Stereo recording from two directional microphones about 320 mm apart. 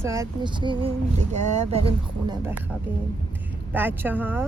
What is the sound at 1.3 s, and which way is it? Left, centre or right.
Speech, right.